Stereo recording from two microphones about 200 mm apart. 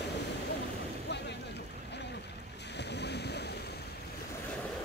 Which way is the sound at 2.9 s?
55° left (ahead or behind).